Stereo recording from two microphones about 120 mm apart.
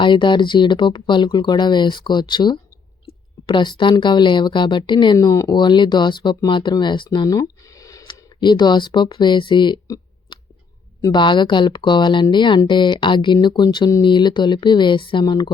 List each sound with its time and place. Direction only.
0.0 s speech: 40° left (ahead or behind)
5.1 s speech: 25° left (ahead or behind)
5.5 s speech: 40° left (ahead or behind)
8.0 s speech: 40° left (ahead or behind)
10.3 s a sound: 40° left (ahead or behind)
11.0 s speech: 40° left (ahead or behind)